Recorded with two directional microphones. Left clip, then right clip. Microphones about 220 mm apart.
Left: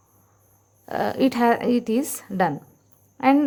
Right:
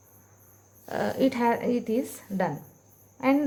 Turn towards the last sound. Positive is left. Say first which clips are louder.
# left 6 dB
turn(degrees=40)  # may be behind; listen again after turning